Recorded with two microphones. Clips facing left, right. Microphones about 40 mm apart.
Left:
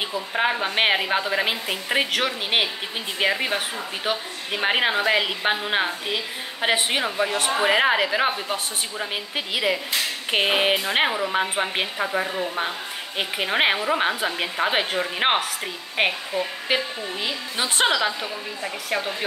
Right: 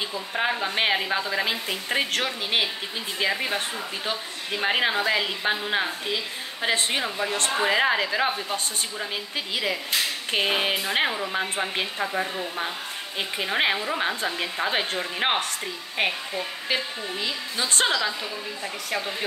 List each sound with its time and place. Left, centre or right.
0.3 s a woman's voice: centre